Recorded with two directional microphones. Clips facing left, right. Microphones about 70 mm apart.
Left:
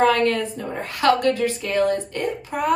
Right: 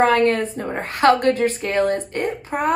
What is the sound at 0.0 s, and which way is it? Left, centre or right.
A woman's voice, right.